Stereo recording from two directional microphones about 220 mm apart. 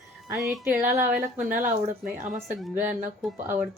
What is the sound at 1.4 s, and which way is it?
Speech, 35° right (ahead or behind).